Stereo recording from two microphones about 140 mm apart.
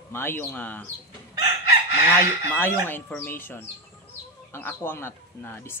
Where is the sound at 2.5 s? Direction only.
15° left (ahead or behind).